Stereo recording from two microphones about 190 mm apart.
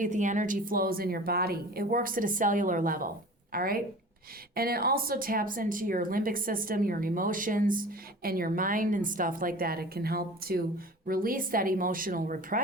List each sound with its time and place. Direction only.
0.0 s speech: 40° right (ahead or behind)